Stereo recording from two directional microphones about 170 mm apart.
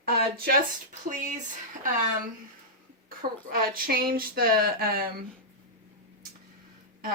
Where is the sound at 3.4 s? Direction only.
60° right (ahead or behind).